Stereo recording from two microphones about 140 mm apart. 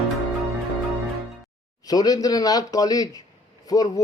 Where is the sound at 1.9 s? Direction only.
25° left (ahead or behind).